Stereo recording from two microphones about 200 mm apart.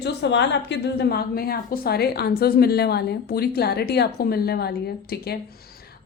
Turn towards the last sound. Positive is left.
turn(degrees=50)  # may be behind; listen again after turning